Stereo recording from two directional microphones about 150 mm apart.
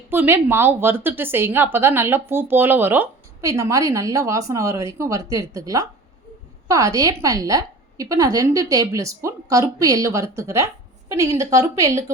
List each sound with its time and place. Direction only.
0.1 s a woman's voice: 15° right (ahead or behind)